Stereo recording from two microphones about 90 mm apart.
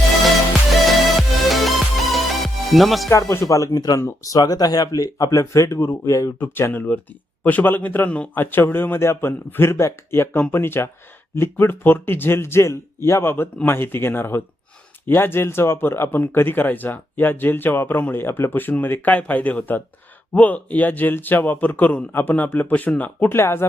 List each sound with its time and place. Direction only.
1.5 s music: centre (ahead or behind)
3.1 s speech: 35° left (ahead or behind)
6.4 s speech: 25° left (ahead or behind)